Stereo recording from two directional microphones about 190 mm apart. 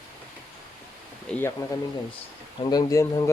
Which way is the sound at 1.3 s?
10° left (ahead or behind).